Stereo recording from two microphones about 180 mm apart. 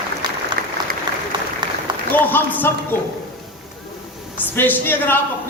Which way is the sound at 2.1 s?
10° left (ahead or behind).